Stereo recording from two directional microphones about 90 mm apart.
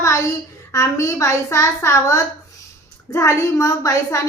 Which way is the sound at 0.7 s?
35° left (ahead or behind).